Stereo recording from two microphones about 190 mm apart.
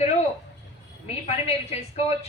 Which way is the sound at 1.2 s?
35° left (ahead or behind).